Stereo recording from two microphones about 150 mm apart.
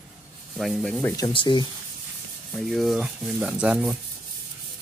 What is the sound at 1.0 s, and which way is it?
Speech, 25° left (ahead or behind).